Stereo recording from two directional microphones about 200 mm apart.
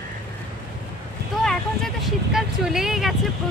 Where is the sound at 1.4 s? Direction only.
Centre (ahead or behind).